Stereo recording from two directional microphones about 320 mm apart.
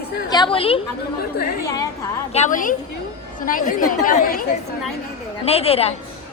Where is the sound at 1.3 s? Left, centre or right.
Left.